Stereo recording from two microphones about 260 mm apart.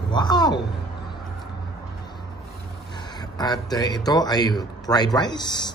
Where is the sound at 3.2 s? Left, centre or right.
Centre.